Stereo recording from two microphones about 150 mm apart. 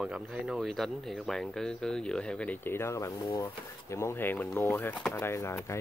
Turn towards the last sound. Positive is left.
turn(degrees=20)  # may be behind; listen again after turning